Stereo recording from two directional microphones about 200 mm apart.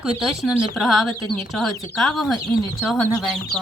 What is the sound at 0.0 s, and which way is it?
Speech, 5° right (ahead or behind).